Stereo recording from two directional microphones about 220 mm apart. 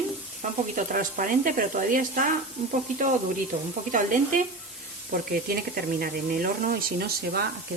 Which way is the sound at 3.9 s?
35° right (ahead or behind).